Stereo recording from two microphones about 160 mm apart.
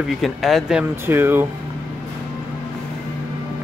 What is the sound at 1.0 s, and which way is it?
Speech, 15° right (ahead or behind).